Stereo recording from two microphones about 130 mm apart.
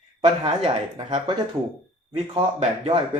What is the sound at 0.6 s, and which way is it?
Speech, 35° right (ahead or behind).